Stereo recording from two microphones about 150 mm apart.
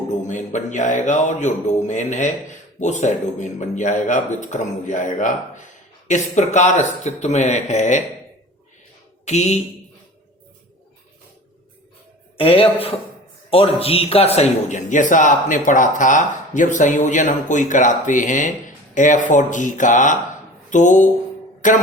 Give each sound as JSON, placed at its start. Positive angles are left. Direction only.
{"t": 0.3, "sound": "a man's voice", "side_deg": 55}
{"t": 9.2, "sound": "a man's voice", "side_deg": 50}
{"t": 12.4, "sound": "a man's voice", "side_deg": 40}
{"t": 21.6, "sound": "music", "side_deg": 60}